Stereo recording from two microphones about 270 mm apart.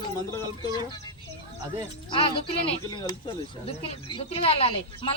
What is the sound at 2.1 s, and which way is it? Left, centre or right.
Speech, centre.